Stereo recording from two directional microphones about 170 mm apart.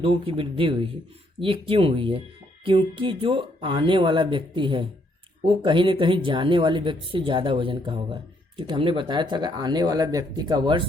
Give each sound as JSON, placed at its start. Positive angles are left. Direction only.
{"t": 0.0, "sound": "speech", "side_deg": -30}